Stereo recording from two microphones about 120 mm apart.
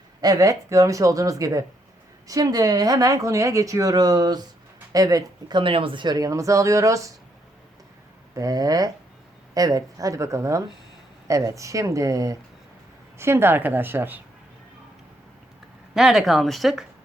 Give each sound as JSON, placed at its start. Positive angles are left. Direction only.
{"t": 0.2, "sound": "a woman's voice", "side_deg": -30}
{"t": 8.4, "sound": "a woman's voice", "side_deg": -30}
{"t": 16.0, "sound": "speech", "side_deg": -5}